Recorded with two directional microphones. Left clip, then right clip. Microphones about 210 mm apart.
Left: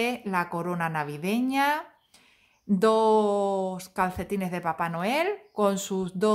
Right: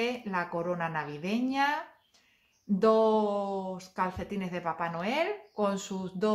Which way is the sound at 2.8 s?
50° left (ahead or behind).